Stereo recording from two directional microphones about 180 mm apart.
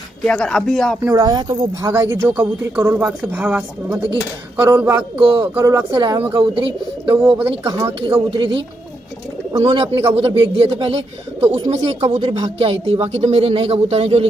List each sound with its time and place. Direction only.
0.2 s speech: 5° left (ahead or behind)
1.1 s a woman's voice: 20° right (ahead or behind)
5.2 s a woman's voice: 30° right (ahead or behind)
7.2 s a woman's voice: 10° right (ahead or behind)
8.0 s a woman's voice: 30° right (ahead or behind)